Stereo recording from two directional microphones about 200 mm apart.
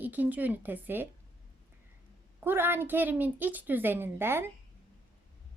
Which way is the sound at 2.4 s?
10° right (ahead or behind).